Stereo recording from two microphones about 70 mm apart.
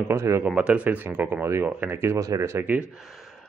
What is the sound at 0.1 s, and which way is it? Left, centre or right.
Speech, right.